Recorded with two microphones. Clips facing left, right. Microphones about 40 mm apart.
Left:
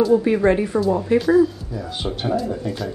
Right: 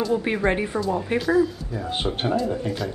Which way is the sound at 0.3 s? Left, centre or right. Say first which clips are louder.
Left 6 dB; right.